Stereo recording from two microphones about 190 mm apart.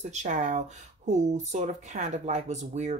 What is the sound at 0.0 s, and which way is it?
Speech, 35° right (ahead or behind).